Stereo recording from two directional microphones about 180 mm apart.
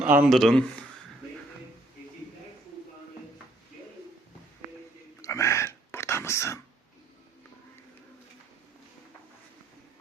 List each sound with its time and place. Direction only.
0.0 s speech: 10° right (ahead or behind)
5.2 s whispering: 15° left (ahead or behind)